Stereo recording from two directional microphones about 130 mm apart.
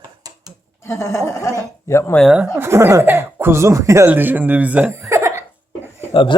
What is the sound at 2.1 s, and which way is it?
Speech, centre (ahead or behind).